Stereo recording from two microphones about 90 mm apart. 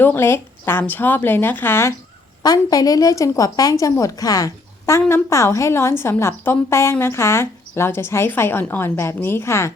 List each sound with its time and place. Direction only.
0.0 s speech: 25° left (ahead or behind)
2.4 s a woman's voice: 45° left (ahead or behind)